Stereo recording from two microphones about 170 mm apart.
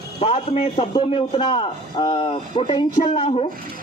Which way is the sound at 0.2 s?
35° left (ahead or behind).